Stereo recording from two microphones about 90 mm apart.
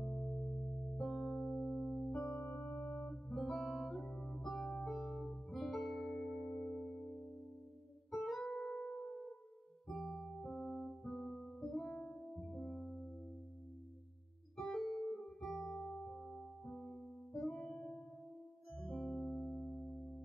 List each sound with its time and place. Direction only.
0.0 s music: 5° left (ahead or behind)
1.2 s music: 5° right (ahead or behind)
2.2 s music: 25° left (ahead or behind)
3.3 s music: 5° left (ahead or behind)
14.6 s keyboard: centre (ahead or behind)
15.9 s music: 5° left (ahead or behind)
18.8 s music: 5° right (ahead or behind)